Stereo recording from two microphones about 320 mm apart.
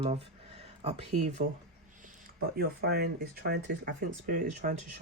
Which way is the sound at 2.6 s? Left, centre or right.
Right.